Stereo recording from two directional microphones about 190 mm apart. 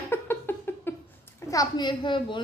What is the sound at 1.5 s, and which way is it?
Speech, 20° left (ahead or behind).